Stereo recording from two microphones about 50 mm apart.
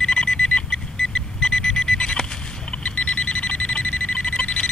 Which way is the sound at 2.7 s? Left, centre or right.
Left.